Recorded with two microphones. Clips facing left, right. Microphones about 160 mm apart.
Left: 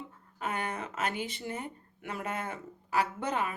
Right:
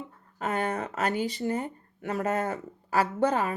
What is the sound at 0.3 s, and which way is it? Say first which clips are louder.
Speech: right 6 dB; 40° right (ahead or behind).